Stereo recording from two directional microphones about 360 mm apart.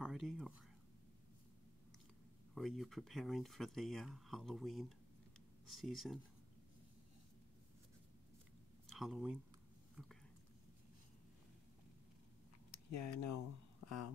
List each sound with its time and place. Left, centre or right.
0.0 s speech: centre
2.5 s speech: centre
8.8 s speech: centre
12.7 s speech: left